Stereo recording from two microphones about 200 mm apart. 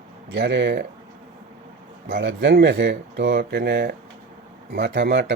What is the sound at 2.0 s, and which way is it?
Speech, 55° right (ahead or behind).